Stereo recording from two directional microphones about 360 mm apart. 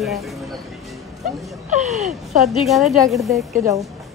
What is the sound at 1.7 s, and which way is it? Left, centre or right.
Speech, centre.